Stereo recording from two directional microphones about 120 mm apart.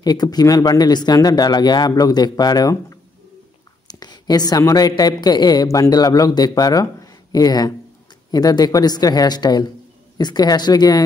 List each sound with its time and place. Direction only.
0.0 s speech: 35° left (ahead or behind)